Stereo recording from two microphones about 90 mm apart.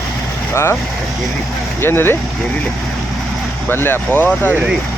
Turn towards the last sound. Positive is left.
turn(degrees=20)  # may be behind; listen again after turning